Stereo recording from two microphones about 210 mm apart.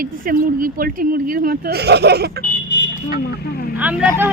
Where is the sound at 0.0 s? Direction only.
40° right (ahead or behind).